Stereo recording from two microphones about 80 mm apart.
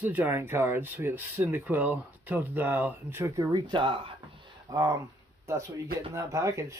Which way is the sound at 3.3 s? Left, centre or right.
Right.